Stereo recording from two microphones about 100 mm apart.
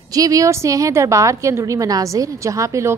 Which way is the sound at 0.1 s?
35° right (ahead or behind).